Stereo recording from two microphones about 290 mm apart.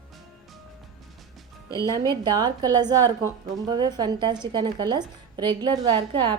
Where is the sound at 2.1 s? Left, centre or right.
Centre.